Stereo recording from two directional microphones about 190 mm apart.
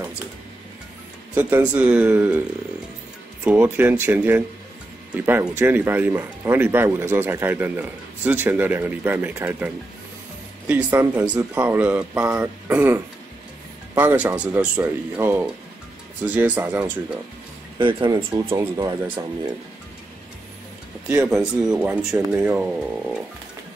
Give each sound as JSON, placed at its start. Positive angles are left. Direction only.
{"t": 1.3, "sound": "speech", "side_deg": -10}
{"t": 3.4, "sound": "speech", "side_deg": -10}
{"t": 10.7, "sound": "speech", "side_deg": -10}
{"t": 17.7, "sound": "speech", "side_deg": -25}
{"t": 21.1, "sound": "speech", "side_deg": -5}